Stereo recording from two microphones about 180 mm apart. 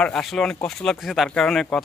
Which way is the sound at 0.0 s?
Centre (ahead or behind).